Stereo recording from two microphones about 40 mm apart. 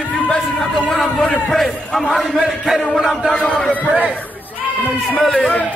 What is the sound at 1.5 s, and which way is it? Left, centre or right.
Speech, centre.